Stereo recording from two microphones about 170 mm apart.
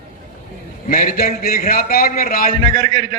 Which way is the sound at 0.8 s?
55° left (ahead or behind).